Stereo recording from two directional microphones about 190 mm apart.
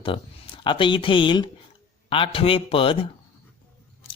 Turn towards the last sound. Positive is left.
turn(degrees=30)  # may be behind; listen again after turning